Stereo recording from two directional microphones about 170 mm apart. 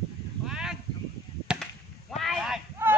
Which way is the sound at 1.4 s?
5° right (ahead or behind).